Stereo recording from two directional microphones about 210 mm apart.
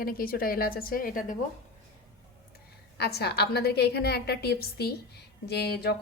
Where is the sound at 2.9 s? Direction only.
50° left (ahead or behind).